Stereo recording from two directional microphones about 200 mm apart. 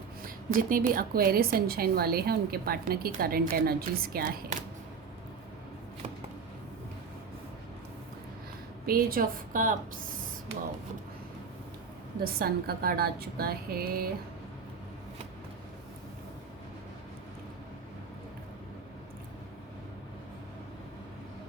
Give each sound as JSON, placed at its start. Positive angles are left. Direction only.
{"t": 0.2, "sound": "a woman's voice", "side_deg": -45}
{"t": 8.9, "sound": "a woman's voice", "side_deg": -45}
{"t": 12.2, "sound": "a woman's voice", "side_deg": -50}